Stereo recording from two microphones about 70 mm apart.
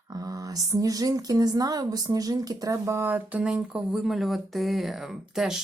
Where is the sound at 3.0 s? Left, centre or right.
Right.